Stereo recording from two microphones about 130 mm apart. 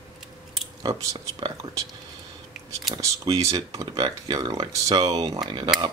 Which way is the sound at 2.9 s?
25° right (ahead or behind).